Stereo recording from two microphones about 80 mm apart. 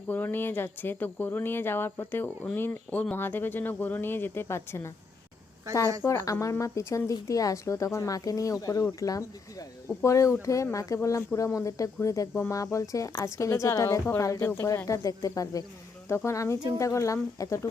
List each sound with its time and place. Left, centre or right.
0.1 s speech: left
6.1 s speech: left
16.0 s speech: left